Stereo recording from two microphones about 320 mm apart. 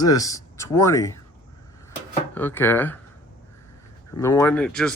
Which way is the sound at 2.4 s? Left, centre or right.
Centre.